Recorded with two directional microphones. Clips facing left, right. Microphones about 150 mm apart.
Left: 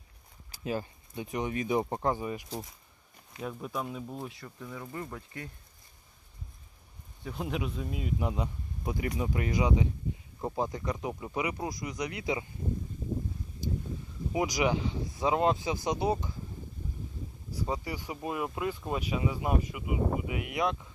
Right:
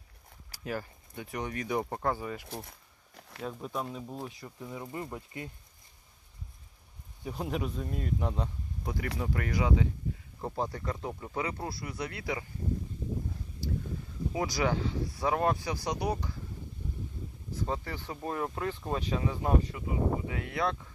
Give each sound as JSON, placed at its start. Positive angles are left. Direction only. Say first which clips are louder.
{"t": 0.5, "sound": "speech", "louder": "left 3 dB", "side_deg": 20}
{"t": 3.2, "sound": "a sound", "louder": "right 1 dB", "side_deg": -75}
{"t": 3.4, "sound": "speech", "louder": "even", "side_deg": 5}
{"t": 4.4, "sound": "speech", "louder": "right 1 dB", "side_deg": -20}
{"t": 7.3, "sound": "speech", "louder": "even", "side_deg": 0}
{"t": 13.6, "sound": "a sound", "louder": "left 1 dB", "side_deg": 20}
{"t": 14.3, "sound": "speech", "louder": "left 2 dB", "side_deg": 15}
{"t": 17.5, "sound": "speech", "louder": "left 1 dB", "side_deg": 10}